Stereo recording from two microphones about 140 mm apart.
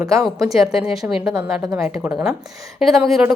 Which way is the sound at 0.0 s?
5° right (ahead or behind).